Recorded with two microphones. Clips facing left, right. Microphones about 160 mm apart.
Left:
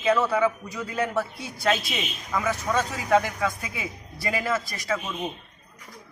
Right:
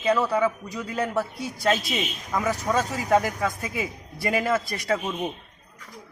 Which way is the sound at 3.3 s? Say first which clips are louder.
Right 1 dB; 45° right (ahead or behind).